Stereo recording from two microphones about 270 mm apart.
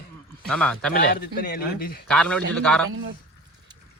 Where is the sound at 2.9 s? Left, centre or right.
Right.